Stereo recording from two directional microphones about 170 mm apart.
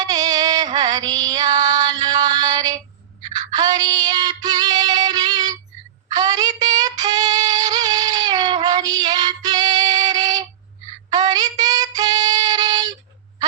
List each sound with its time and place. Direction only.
0.0 s music: 25° right (ahead or behind)
6.1 s child singing: 25° right (ahead or behind)